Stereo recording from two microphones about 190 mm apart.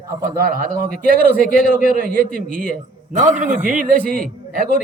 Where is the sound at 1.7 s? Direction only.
45° left (ahead or behind).